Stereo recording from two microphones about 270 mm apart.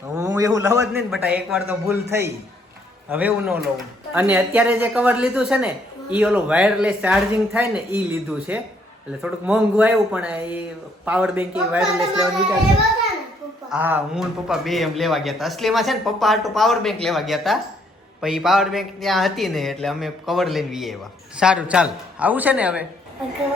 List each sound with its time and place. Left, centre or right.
0.1 s a man's voice: centre
13.7 s speech: centre